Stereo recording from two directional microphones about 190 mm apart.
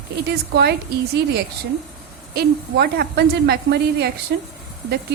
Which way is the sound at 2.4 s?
55° right (ahead or behind).